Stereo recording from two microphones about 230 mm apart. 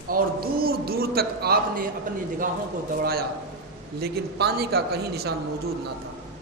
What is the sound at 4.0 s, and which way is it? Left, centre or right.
A man's voice, right.